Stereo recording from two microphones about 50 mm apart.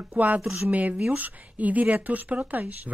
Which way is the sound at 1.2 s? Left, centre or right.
Right.